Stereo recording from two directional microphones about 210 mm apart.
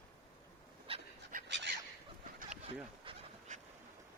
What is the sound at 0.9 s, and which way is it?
Dog, 25° right (ahead or behind).